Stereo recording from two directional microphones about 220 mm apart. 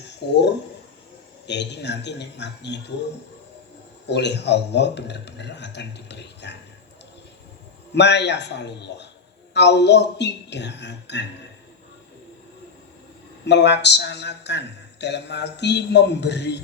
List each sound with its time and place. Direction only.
1.5 s speech: 50° left (ahead or behind)
4.0 s speech: 50° left (ahead or behind)
7.9 s speech: 50° left (ahead or behind)
13.4 s speech: 50° left (ahead or behind)